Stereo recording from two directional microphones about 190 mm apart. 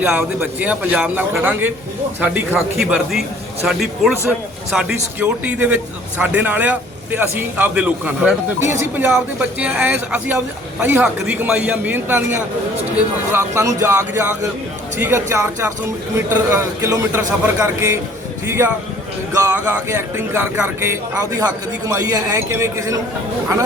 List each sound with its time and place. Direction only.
0.0 s a man's voice: 10° right (ahead or behind)